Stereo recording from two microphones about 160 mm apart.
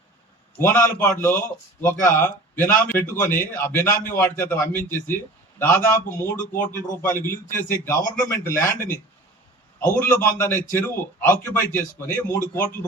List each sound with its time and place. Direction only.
0.6 s a man's voice: 10° left (ahead or behind)